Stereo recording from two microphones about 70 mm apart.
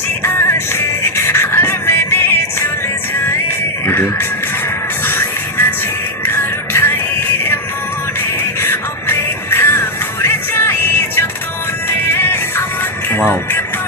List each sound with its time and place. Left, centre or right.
0.2 s music: left
3.8 s music: left
8.6 s music: left